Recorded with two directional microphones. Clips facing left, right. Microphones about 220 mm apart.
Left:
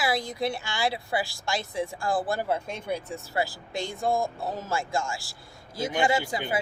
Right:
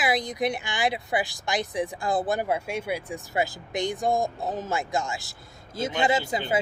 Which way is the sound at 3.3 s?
20° right (ahead or behind).